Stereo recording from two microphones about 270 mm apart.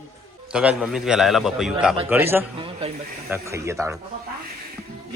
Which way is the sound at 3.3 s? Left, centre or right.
Centre.